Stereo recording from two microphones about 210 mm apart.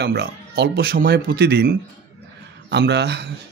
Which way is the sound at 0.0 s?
55° right (ahead or behind).